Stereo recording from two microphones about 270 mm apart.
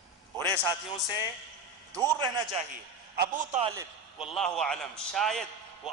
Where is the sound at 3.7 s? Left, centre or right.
Centre.